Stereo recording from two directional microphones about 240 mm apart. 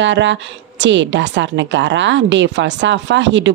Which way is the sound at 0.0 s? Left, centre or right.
Right.